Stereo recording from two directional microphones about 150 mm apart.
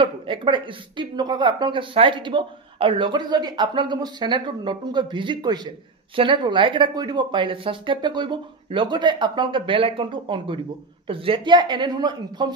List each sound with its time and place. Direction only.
0.0 s speech: 35° right (ahead or behind)